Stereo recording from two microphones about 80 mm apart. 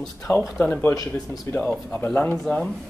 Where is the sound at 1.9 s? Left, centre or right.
Centre.